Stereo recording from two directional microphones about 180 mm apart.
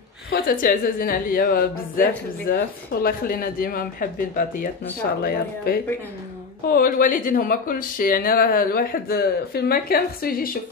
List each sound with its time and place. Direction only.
0.3 s a woman's voice: 55° left (ahead or behind)